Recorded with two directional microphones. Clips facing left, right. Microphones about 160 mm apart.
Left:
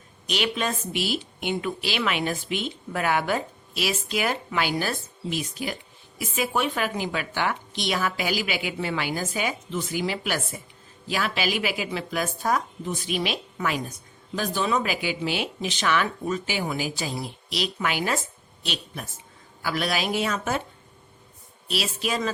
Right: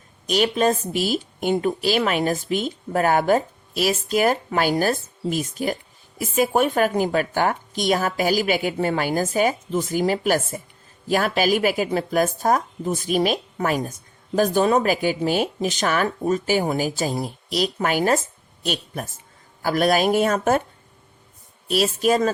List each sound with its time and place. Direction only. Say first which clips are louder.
0.3 s a woman's voice: right 8 dB; 40° right (ahead or behind)
21.7 s a woman's voice: right 9 dB; 45° right (ahead or behind)